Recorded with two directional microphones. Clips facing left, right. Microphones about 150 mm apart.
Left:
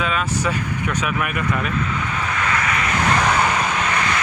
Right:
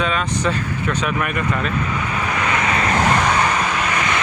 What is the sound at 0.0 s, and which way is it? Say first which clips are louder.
Speech: right 2 dB; 5° left (ahead or behind).